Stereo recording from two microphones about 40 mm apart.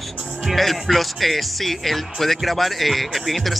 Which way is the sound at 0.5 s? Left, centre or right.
Centre.